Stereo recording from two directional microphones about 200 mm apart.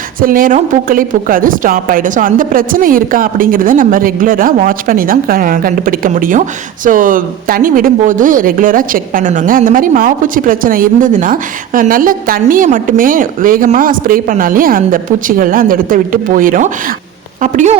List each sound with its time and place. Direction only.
0.2 s speech: 45° right (ahead or behind)